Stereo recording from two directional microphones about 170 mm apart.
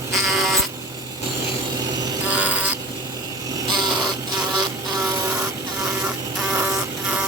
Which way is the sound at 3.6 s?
25° right (ahead or behind).